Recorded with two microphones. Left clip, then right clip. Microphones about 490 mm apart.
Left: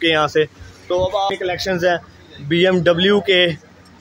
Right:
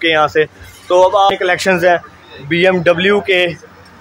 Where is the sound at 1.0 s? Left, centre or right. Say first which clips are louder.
Right 9 dB; left.